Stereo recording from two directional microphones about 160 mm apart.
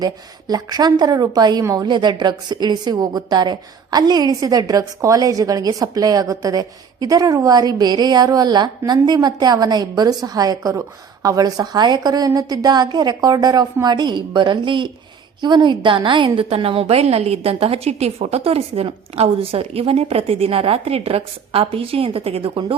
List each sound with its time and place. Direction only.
0.0 s a woman's voice: 25° right (ahead or behind)